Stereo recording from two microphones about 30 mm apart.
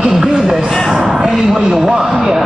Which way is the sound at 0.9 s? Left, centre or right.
Centre.